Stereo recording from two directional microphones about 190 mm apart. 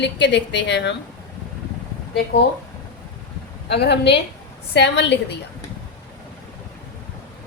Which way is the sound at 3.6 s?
60° left (ahead or behind).